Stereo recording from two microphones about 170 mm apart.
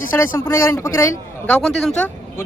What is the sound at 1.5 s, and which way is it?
Speech, centre (ahead or behind).